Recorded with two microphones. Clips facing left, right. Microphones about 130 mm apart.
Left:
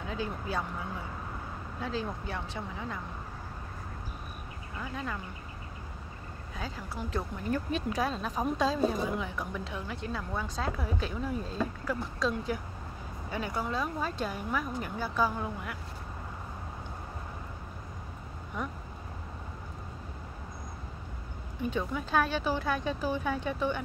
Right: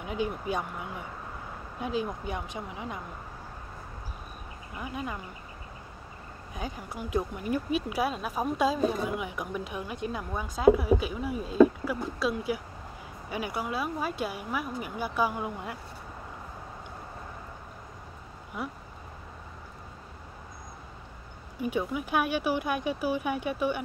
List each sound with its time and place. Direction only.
0.0 s a woman's voice: 20° right (ahead or behind)
4.7 s a woman's voice: 15° right (ahead or behind)
6.5 s a woman's voice: 15° right (ahead or behind)
18.6 s a woman's voice: 10° right (ahead or behind)
21.5 s a woman's voice: 10° right (ahead or behind)